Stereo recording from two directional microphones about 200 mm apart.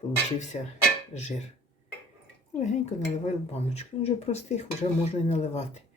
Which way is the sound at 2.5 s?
35° left (ahead or behind).